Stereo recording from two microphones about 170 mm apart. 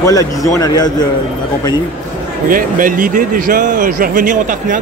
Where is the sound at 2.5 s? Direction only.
55° right (ahead or behind).